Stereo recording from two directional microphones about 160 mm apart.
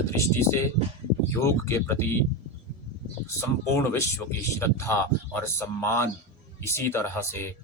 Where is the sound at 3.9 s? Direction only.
15° left (ahead or behind).